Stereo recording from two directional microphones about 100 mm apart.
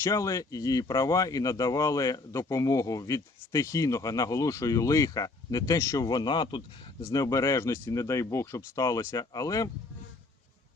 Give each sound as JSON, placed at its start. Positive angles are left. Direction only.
{"t": 0.0, "sound": "speech", "side_deg": 30}
{"t": 6.1, "sound": "speech", "side_deg": 45}
{"t": 7.0, "sound": "speech", "side_deg": 35}